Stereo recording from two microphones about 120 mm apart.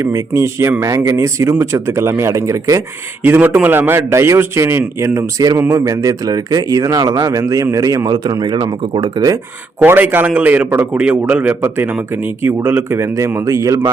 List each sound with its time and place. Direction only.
0.0 s a man's voice: 25° right (ahead or behind)
9.8 s a man's voice: 15° right (ahead or behind)